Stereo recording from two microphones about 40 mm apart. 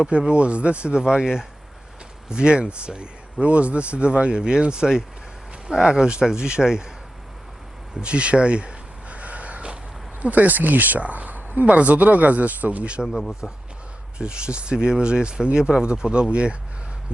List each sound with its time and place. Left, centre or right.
0.0 s speech: right
1.0 s speech: centre
8.0 s a sound: right
10.2 s speech: right
11.0 s a sound: right
11.6 s speech: right
13.1 s speech: centre
14.2 s speech: right